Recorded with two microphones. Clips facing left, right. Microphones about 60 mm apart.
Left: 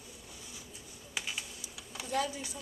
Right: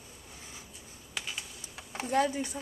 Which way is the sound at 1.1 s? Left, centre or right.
Centre.